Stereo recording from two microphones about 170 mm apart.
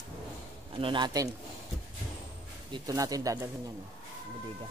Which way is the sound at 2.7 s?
20° right (ahead or behind).